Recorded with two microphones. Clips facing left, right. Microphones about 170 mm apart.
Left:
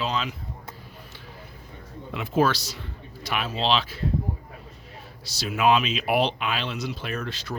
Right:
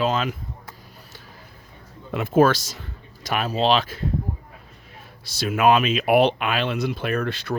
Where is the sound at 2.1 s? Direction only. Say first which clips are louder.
Right 5 dB; 50° right (ahead or behind).